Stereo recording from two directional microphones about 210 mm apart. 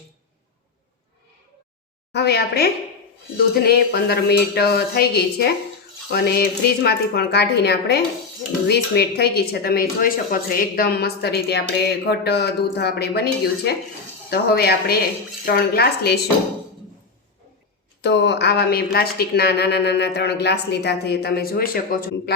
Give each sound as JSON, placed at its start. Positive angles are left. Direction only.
{"t": 2.1, "sound": "speech", "side_deg": 50}
{"t": 18.0, "sound": "speech", "side_deg": 55}